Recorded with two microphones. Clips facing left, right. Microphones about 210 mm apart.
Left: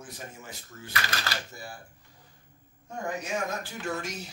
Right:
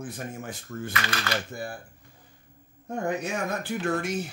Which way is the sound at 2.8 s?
60° right (ahead or behind).